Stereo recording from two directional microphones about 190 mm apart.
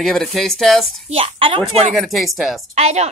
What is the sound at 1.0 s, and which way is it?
Speech, 30° right (ahead or behind).